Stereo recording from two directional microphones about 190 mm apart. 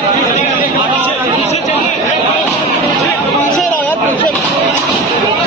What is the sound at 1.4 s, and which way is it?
Chatter, 35° left (ahead or behind).